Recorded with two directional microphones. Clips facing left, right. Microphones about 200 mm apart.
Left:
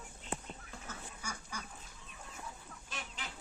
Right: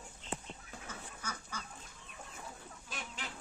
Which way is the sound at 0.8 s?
10° left (ahead or behind).